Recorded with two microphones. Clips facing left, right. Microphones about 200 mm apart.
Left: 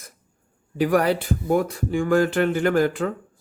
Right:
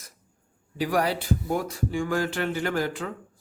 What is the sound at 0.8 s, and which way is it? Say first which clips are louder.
Speech: left 6 dB; 55° left (ahead or behind).